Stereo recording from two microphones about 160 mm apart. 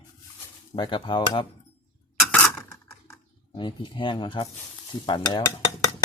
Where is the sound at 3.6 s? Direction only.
30° left (ahead or behind).